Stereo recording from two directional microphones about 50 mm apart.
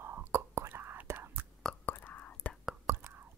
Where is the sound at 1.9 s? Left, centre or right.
Left.